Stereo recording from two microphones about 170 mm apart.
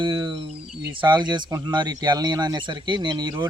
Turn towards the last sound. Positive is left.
turn(degrees=-25)  # may be behind; listen again after turning